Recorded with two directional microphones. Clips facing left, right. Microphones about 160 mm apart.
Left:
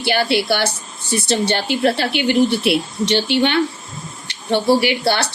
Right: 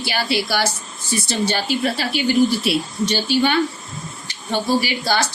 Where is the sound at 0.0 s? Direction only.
60° left (ahead or behind).